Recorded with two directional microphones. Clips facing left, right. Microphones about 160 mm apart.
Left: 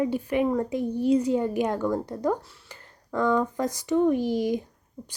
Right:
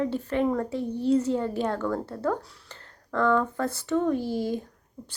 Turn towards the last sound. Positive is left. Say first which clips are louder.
# left 3 dB
turn(degrees=15)  # may be behind; listen again after turning